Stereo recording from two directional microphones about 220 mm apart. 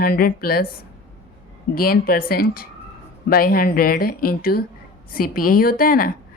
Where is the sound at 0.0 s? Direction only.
45° left (ahead or behind).